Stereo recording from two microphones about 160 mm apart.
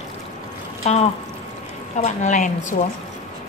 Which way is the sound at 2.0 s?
50° left (ahead or behind).